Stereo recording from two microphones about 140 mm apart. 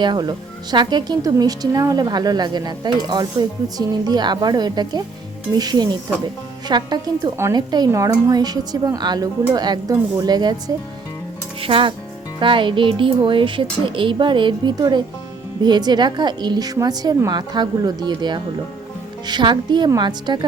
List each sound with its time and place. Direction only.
0.0 s speech: 30° right (ahead or behind)
11.6 s a woman's voice: 40° right (ahead or behind)